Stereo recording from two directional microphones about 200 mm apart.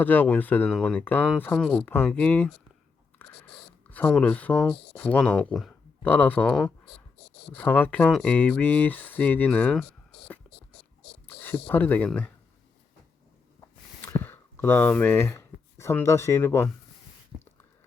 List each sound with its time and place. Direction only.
0.0 s speech: 10° left (ahead or behind)
3.2 s biting: 10° left (ahead or behind)
3.8 s speech: 5° left (ahead or behind)
7.2 s a sound: 55° left (ahead or behind)
7.5 s speech: 10° left (ahead or behind)
10.5 s dog: centre (ahead or behind)
11.3 s speech: 10° left (ahead or behind)
14.0 s speech: 10° left (ahead or behind)
17.3 s a sound: 15° left (ahead or behind)